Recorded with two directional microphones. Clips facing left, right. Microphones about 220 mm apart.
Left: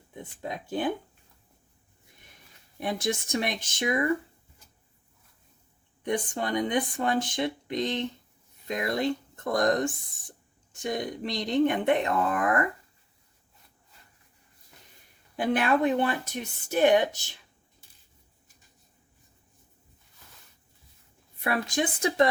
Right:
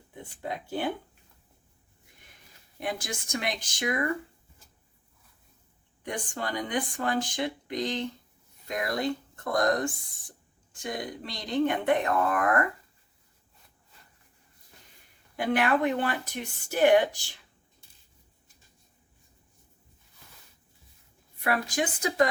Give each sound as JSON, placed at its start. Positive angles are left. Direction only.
{"t": 0.2, "sound": "speech", "side_deg": 20}
{"t": 2.8, "sound": "speech", "side_deg": 25}
{"t": 6.1, "sound": "speech", "side_deg": 20}
{"t": 10.8, "sound": "speech", "side_deg": 20}
{"t": 15.4, "sound": "speech", "side_deg": 20}
{"t": 21.4, "sound": "speech", "side_deg": 25}